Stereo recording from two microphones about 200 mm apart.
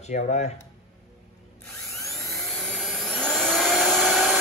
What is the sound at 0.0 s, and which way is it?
Speech, 35° left (ahead or behind).